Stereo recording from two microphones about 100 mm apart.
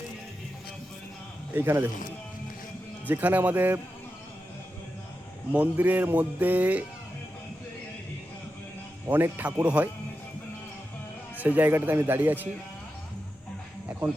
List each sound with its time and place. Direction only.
1.5 s speech: 25° right (ahead or behind)
3.1 s speech: 20° right (ahead or behind)
5.5 s speech: 20° right (ahead or behind)
9.0 s speech: 20° right (ahead or behind)
11.3 s speech: 15° right (ahead or behind)